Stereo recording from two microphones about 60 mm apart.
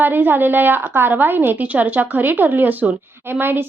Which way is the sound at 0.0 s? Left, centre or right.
Right.